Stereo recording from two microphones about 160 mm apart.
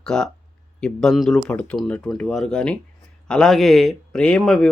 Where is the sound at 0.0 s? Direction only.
5° left (ahead or behind).